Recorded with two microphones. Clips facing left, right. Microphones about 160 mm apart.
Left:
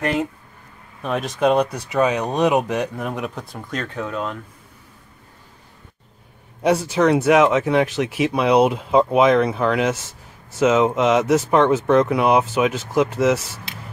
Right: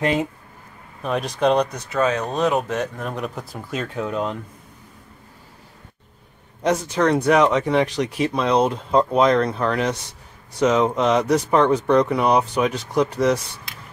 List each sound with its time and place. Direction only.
0.0 s speech: 15° right (ahead or behind)
1.0 s speech: centre (ahead or behind)
6.6 s speech: 10° left (ahead or behind)